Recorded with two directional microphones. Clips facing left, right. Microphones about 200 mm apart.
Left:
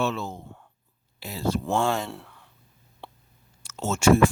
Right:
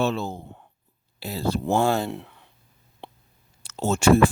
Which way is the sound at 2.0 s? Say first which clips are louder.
Right 6 dB; 20° right (ahead or behind).